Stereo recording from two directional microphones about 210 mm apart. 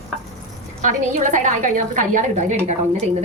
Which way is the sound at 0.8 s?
35° right (ahead or behind).